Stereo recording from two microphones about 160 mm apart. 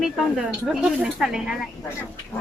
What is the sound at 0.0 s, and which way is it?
Speech, centre (ahead or behind).